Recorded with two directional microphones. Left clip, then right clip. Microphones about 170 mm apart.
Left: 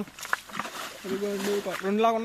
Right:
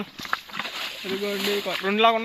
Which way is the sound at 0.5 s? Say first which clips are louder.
Right 4 dB; 50° left (ahead or behind).